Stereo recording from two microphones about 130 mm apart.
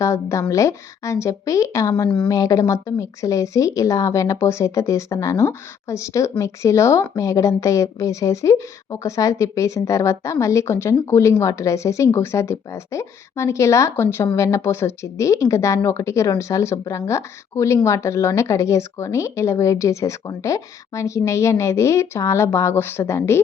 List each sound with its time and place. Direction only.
0.0 s a woman's voice: 25° left (ahead or behind)